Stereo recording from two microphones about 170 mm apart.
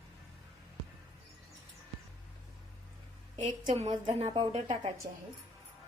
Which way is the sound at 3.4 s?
30° right (ahead or behind).